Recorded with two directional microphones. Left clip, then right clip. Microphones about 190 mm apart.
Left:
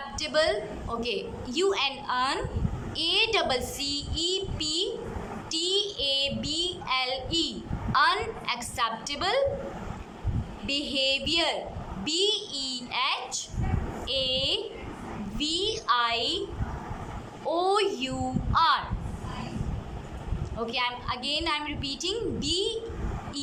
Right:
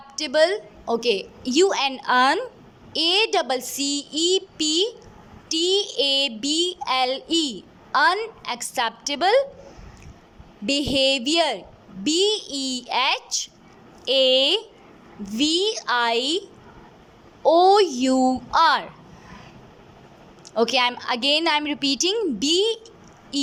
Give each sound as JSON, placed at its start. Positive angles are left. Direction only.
{"t": 0.2, "sound": "a woman's voice", "side_deg": -40}
{"t": 10.7, "sound": "a woman's voice", "side_deg": -40}
{"t": 17.4, "sound": "a woman's voice", "side_deg": -40}
{"t": 20.6, "sound": "a woman's voice", "side_deg": -45}